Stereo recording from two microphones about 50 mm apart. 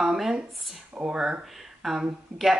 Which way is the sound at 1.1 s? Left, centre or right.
Centre.